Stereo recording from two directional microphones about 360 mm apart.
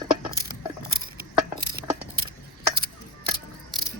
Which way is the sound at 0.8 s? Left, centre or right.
Right.